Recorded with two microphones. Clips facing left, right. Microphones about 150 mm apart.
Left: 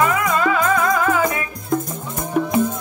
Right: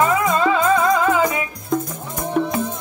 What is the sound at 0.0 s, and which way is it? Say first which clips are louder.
Music: right 1 dB; 30° right (ahead or behind).